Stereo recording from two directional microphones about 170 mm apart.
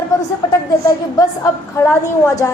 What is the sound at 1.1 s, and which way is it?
A woman's voice, 20° left (ahead or behind).